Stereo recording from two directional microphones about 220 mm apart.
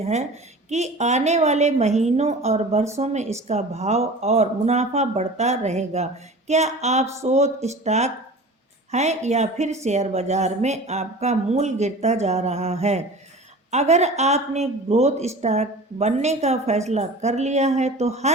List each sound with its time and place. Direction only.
0.0 s a woman's voice: 30° right (ahead or behind)